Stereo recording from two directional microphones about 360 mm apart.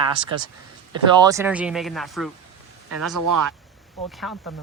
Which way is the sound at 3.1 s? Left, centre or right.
Right.